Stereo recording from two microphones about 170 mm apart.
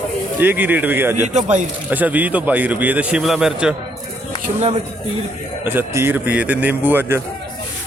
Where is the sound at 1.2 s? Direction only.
45° right (ahead or behind).